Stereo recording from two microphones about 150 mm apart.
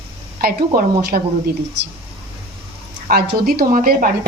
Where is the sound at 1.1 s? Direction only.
65° right (ahead or behind).